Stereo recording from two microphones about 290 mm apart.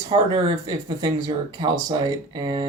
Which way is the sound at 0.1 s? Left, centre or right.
Centre.